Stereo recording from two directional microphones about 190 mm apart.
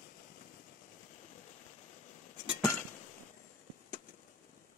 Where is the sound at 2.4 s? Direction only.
15° left (ahead or behind).